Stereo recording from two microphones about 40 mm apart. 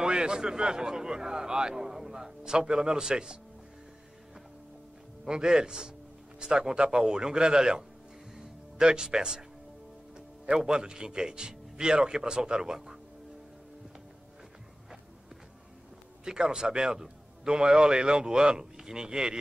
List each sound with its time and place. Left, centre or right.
0.0 s speech: right
5.2 s a man's voice: centre
8.4 s music: centre
10.1 s a man's voice: centre
16.3 s a man's voice: centre